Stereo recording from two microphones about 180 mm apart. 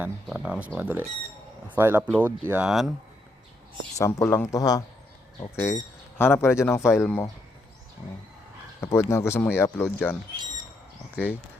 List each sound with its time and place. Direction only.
0.0 s speech: 5° right (ahead or behind)
3.9 s speech: 15° left (ahead or behind)
8.8 s speech: 15° left (ahead or behind)